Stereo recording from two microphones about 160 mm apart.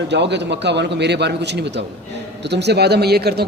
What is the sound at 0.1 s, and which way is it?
A man's voice, 90° right.